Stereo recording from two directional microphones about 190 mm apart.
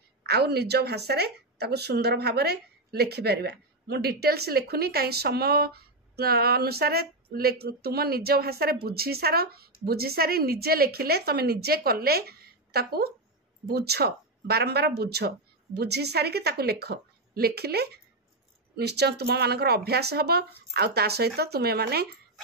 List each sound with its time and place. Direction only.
0.3 s a woman's voice: 60° right (ahead or behind)